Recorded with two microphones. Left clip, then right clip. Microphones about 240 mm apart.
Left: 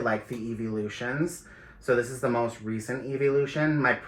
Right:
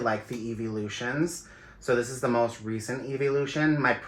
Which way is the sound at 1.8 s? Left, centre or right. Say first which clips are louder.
Left 1 dB; centre.